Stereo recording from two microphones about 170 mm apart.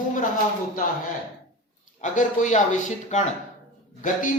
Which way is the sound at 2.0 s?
45° left (ahead or behind).